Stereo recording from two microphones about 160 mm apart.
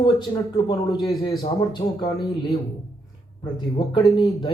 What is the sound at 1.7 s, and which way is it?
A man's voice, 25° left (ahead or behind).